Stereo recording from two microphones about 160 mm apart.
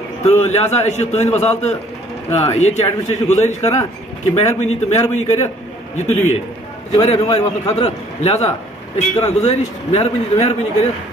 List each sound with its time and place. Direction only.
0.2 s a man's voice: 45° left (ahead or behind)